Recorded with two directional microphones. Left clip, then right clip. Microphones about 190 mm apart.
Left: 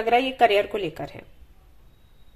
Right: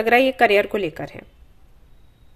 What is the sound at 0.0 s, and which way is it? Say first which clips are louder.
Speech: right 4 dB; 40° right (ahead or behind).